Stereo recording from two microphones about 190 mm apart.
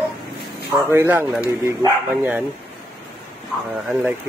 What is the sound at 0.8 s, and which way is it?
Speech, 10° right (ahead or behind).